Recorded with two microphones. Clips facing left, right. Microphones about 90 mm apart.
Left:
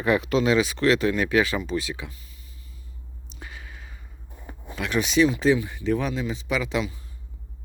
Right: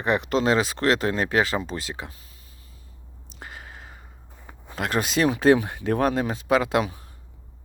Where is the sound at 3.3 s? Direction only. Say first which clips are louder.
Right 2 dB; 30° right (ahead or behind).